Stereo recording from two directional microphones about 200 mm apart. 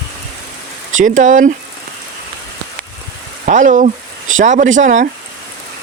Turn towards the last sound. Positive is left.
turn(degrees=-40)  # may be behind; listen again after turning